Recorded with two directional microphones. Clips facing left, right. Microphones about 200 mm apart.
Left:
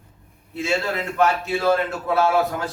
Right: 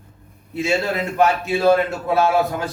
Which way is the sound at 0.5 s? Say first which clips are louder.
Right 3 dB; 15° right (ahead or behind).